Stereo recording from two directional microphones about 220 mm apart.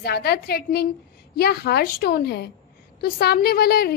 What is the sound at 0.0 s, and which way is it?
A woman's voice, 45° left (ahead or behind).